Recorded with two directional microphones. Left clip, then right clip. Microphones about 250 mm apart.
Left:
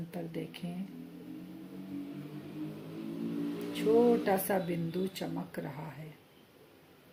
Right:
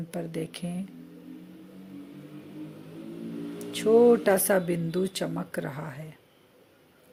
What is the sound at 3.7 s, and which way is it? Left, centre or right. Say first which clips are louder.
Speech: right 7 dB; right.